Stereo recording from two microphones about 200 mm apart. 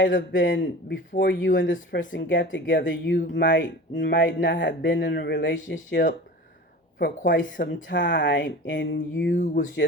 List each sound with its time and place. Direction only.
0.0 s speech: 65° left (ahead or behind)
7.3 s speech: 70° left (ahead or behind)
7.6 s speech: 45° left (ahead or behind)
7.9 s speech: 65° left (ahead or behind)
9.3 s speech: 40° left (ahead or behind)